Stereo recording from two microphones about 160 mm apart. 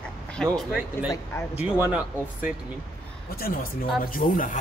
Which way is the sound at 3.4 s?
65° left (ahead or behind).